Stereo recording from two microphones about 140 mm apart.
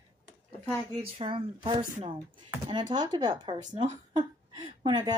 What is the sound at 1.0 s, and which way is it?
Speech, 45° right (ahead or behind).